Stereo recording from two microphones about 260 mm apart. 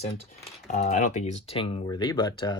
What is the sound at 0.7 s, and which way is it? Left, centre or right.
Speech, left.